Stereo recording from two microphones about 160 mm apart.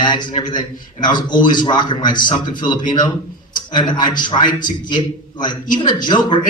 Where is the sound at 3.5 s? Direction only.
30° left (ahead or behind).